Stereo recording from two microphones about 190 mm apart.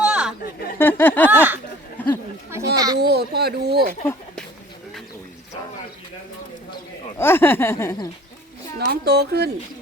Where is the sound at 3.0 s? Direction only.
60° right (ahead or behind).